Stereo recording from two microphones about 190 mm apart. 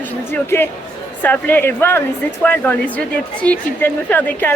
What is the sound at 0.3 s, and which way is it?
A woman's voice, 10° left (ahead or behind).